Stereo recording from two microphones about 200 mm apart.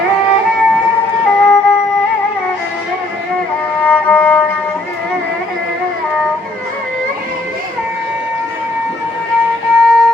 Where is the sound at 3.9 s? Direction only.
5° left (ahead or behind).